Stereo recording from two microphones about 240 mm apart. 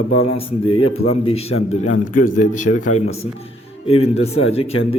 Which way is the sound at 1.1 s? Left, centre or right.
Left.